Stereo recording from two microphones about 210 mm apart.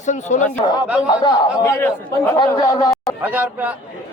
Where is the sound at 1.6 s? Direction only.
10° left (ahead or behind).